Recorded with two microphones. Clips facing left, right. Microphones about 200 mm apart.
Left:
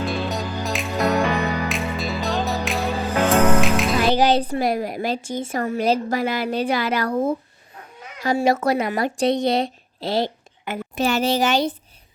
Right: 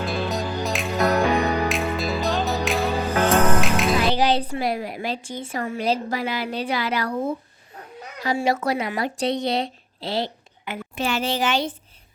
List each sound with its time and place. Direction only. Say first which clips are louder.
0.0 s music: even; centre (ahead or behind)
4.1 s a woman's voice: left 3 dB; 45° left (ahead or behind)